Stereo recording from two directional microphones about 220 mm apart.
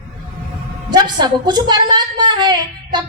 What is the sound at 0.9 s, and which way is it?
A woman's voice, 20° right (ahead or behind).